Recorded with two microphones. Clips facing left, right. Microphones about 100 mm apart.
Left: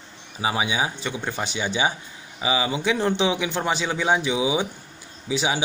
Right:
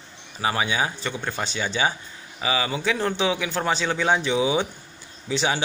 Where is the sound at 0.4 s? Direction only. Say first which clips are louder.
Even; 15° left (ahead or behind).